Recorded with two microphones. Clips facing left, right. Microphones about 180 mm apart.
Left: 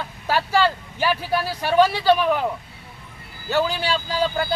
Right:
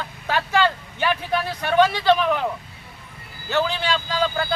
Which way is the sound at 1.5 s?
35° left (ahead or behind).